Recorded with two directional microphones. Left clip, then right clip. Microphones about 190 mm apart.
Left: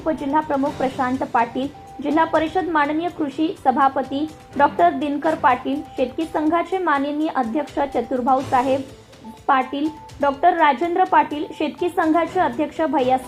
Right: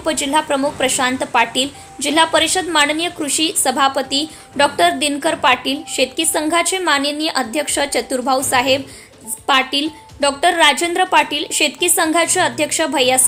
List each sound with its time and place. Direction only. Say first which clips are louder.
0.0 s a woman's voice: right 4 dB; 20° right (ahead or behind)